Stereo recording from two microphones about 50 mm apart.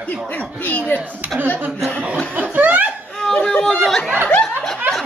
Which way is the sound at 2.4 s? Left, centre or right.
Right.